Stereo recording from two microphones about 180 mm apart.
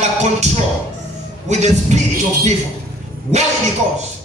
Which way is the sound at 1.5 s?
40° right (ahead or behind).